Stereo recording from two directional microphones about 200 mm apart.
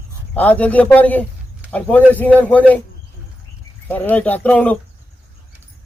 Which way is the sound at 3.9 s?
10° left (ahead or behind).